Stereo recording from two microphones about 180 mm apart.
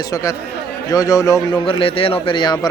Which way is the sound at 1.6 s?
30° left (ahead or behind).